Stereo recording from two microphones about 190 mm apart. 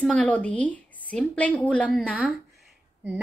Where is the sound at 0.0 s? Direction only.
5° left (ahead or behind).